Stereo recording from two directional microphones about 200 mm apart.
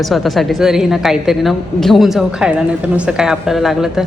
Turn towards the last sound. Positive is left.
turn(degrees=0)  # may be behind; listen again after turning